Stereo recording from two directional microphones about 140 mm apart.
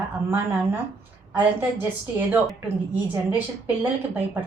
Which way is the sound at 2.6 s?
15° right (ahead or behind).